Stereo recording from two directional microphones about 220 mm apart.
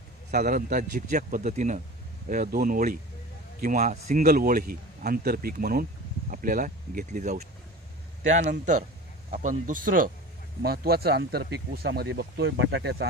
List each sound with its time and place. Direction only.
0.3 s a man's voice: 40° right (ahead or behind)
8.5 s a man's voice: 35° right (ahead or behind); by 13.1 s 55° right (ahead or behind)